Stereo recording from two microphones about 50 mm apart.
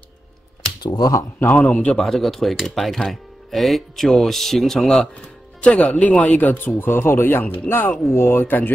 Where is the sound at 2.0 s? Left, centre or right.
Centre.